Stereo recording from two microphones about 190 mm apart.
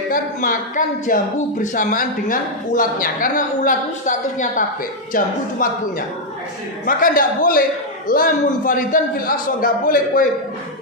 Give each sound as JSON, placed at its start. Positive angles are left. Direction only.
{"t": 0.1, "sound": "a woman's voice", "side_deg": 45}
{"t": 6.8, "sound": "a woman's voice", "side_deg": 45}